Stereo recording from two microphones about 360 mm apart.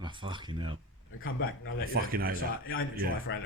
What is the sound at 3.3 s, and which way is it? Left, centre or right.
Speech, left.